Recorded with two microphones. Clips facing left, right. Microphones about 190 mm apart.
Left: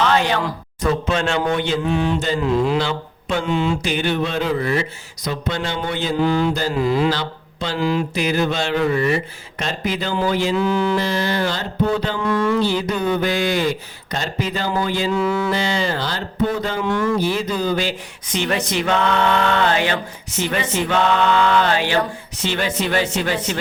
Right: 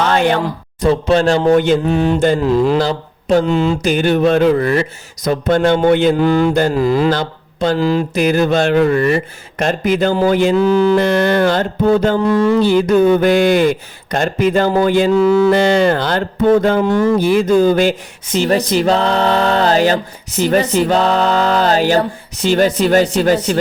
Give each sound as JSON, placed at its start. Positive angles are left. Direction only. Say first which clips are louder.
{"t": 0.1, "sound": "speech", "louder": "right 5 dB", "side_deg": -50}
{"t": 0.8, "sound": "speech", "louder": "right 7 dB", "side_deg": -35}
{"t": 10.9, "sound": "speech", "louder": "right 8 dB", "side_deg": -60}
{"t": 12.3, "sound": "speech", "louder": "right 3 dB", "side_deg": -30}
{"t": 12.6, "sound": "speech", "louder": "right 9 dB", "side_deg": -50}
{"t": 15.2, "sound": "speech", "louder": "right 9 dB", "side_deg": -35}
{"t": 15.5, "sound": "mantra", "louder": "right 9 dB", "side_deg": -55}
{"t": 16.9, "sound": "speech", "louder": "right 6 dB", "side_deg": -40}
{"t": 17.2, "sound": "speech", "louder": "right 9 dB", "side_deg": -50}
{"t": 18.3, "sound": "speech", "louder": "right 7 dB", "side_deg": -35}